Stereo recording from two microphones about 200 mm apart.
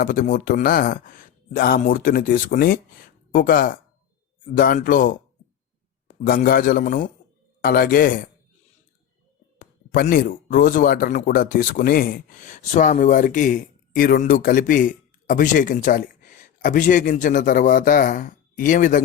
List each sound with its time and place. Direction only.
0.0 s speech: 45° left (ahead or behind)
6.2 s speech: 45° left (ahead or behind)
9.6 s speech: 45° left (ahead or behind)